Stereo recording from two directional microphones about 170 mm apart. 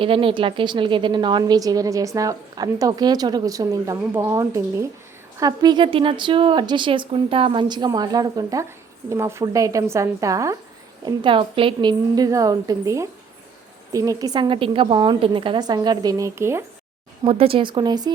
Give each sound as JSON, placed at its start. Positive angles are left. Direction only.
{"t": 0.0, "sound": "a woman's voice", "side_deg": -30}
{"t": 11.0, "sound": "a woman's voice", "side_deg": -30}
{"t": 17.2, "sound": "a woman's voice", "side_deg": -35}